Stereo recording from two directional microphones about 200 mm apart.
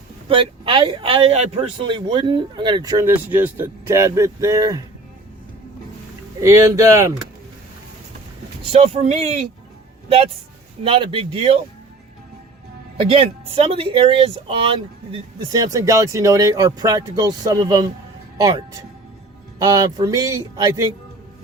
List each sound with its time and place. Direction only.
0.3 s speech: 25° right (ahead or behind)
6.4 s speech: 15° right (ahead or behind)
8.7 s speech: 30° right (ahead or behind)
10.8 s speech: 25° right (ahead or behind)
13.1 s speech: 25° right (ahead or behind)